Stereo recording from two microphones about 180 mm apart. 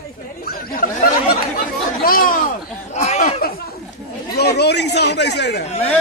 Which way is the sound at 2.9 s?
40° left (ahead or behind).